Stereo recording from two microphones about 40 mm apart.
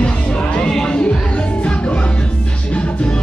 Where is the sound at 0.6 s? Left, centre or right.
Centre.